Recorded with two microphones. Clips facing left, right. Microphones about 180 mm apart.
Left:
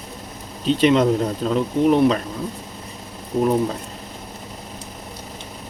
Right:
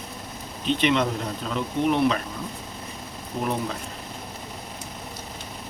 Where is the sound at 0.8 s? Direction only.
40° left (ahead or behind).